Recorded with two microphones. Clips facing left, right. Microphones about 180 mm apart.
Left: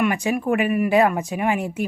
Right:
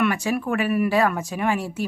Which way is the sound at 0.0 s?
15° left (ahead or behind).